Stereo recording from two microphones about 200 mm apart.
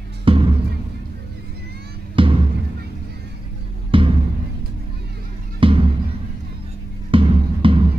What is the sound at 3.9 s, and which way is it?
Music, 25° right (ahead or behind).